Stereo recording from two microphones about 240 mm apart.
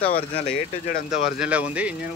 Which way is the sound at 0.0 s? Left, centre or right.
Left.